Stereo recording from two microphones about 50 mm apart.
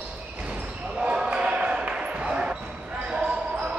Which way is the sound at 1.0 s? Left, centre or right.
Centre.